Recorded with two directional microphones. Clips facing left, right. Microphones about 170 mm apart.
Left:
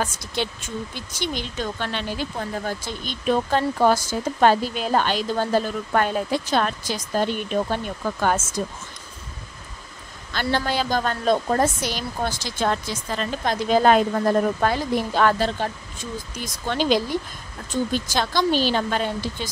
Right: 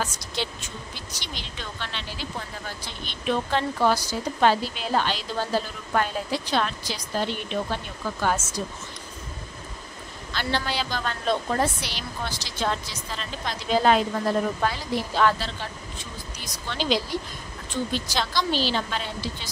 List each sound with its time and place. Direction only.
0.0 s speech: 50° left (ahead or behind)
10.3 s speech: 45° left (ahead or behind)